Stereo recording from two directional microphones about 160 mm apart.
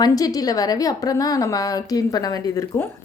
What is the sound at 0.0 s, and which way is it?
A woman's voice, 25° left (ahead or behind).